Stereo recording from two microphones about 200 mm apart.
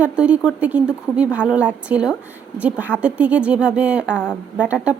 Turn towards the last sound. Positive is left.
turn(degrees=-5)  # may be behind; listen again after turning